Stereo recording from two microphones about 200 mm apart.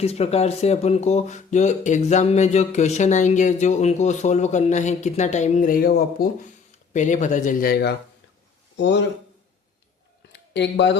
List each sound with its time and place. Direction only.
0.0 s speech: 30° left (ahead or behind); by 6.2 s 50° left (ahead or behind)
6.9 s speech: 35° left (ahead or behind); by 9.0 s 60° left (ahead or behind)
10.3 s a sound: 60° left (ahead or behind)